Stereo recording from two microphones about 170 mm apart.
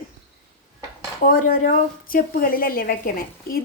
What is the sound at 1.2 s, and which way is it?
A woman's voice, 55° left (ahead or behind).